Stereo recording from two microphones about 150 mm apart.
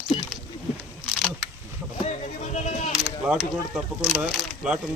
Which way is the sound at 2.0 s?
50° left (ahead or behind).